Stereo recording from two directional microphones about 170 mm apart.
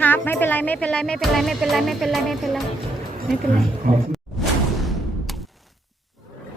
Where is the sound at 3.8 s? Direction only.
55° right (ahead or behind).